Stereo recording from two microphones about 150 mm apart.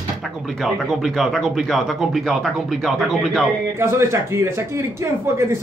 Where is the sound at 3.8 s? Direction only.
15° right (ahead or behind).